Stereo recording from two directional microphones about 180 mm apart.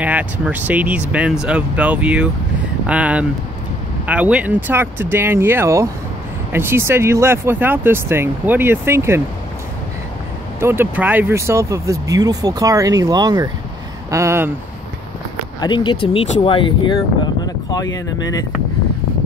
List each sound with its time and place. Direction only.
0.0 s speech: 10° right (ahead or behind)
10.6 s speech: 10° right (ahead or behind)
15.6 s speech: 25° left (ahead or behind)